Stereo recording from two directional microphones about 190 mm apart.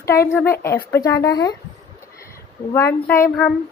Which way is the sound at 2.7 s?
15° left (ahead or behind).